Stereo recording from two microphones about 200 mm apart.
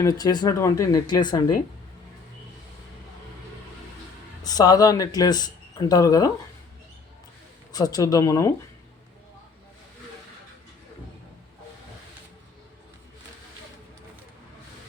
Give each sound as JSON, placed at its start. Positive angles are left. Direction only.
{"t": 0.0, "sound": "speech", "side_deg": 20}
{"t": 4.4, "sound": "speech", "side_deg": 20}
{"t": 7.7, "sound": "speech", "side_deg": 20}